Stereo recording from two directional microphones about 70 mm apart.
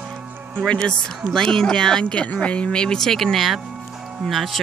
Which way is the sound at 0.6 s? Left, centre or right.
Centre.